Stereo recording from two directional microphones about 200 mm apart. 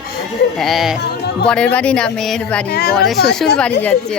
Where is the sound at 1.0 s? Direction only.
55° left (ahead or behind).